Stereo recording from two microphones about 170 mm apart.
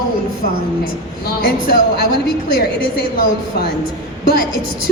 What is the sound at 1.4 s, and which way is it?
A woman's voice, 65° left (ahead or behind).